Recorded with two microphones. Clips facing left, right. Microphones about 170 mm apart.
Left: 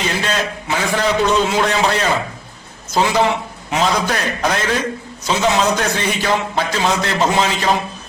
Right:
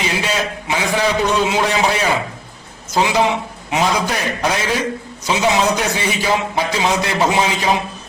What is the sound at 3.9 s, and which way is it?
A man's voice, 5° right (ahead or behind).